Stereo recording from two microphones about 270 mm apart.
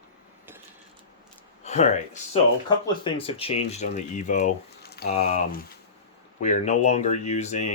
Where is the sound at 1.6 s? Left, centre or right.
Left.